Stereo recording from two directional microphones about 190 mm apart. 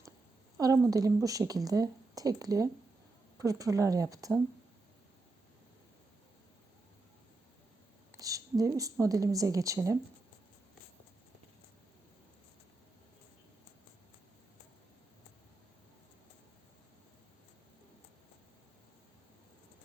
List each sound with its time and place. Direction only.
0.5 s a sound: 15° right (ahead or behind)
0.9 s speech: 20° right (ahead or behind)
8.1 s a woman's voice: 20° right (ahead or behind)